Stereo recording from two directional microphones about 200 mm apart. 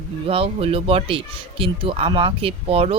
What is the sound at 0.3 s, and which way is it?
Speech, 30° right (ahead or behind).